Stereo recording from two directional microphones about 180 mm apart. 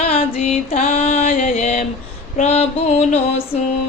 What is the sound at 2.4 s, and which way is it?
Music, 35° left (ahead or behind).